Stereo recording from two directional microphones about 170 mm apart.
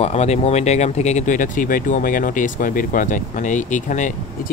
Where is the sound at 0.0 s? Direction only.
40° left (ahead or behind).